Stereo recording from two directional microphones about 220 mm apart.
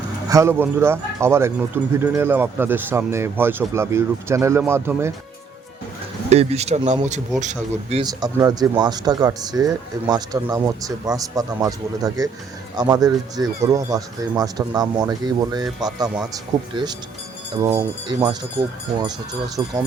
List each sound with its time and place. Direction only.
0.3 s speech: 15° right (ahead or behind)
6.3 s speech: 30° right (ahead or behind)
8.0 s speech: 15° right (ahead or behind)
19.6 s speech: 20° right (ahead or behind)